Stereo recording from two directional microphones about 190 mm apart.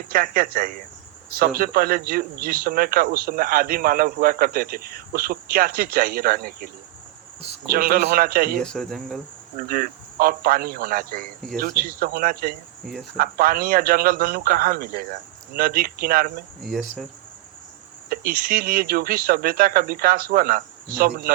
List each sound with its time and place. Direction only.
0.1 s speech: 50° right (ahead or behind)
7.7 s speech: 50° right (ahead or behind)
8.6 s speech: 5° left (ahead or behind)
9.6 s speech: 50° right (ahead or behind)
12.8 s speech: centre (ahead or behind)
13.1 s speech: 50° right (ahead or behind)
18.1 s speech: 50° right (ahead or behind)